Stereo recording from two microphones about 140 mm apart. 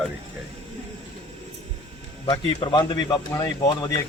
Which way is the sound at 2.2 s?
35° left (ahead or behind).